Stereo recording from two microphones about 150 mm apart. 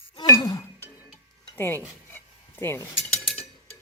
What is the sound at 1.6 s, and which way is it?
Speech, 15° left (ahead or behind).